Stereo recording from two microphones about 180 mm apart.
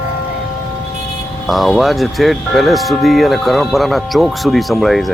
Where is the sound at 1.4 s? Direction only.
Centre (ahead or behind).